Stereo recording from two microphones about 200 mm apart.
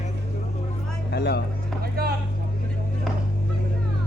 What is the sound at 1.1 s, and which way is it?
Speech, 55° left (ahead or behind).